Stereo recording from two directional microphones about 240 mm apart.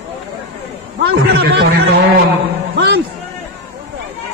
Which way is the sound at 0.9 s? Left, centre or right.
Right.